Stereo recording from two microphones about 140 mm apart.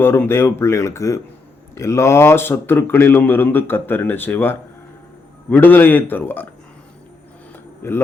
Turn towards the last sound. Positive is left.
turn(degrees=15)  # may be behind; listen again after turning